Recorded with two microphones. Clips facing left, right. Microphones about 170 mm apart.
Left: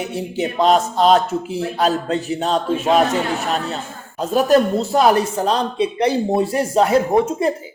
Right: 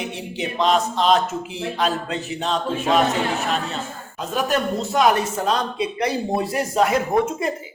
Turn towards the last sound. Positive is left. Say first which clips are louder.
# left 4 dB
turn(degrees=30)  # may be behind; listen again after turning